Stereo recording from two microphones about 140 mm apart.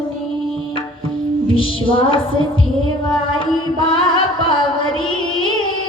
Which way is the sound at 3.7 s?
35° left (ahead or behind).